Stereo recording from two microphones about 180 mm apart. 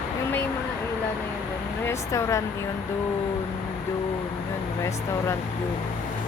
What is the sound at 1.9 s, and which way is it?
Speech, 15° left (ahead or behind).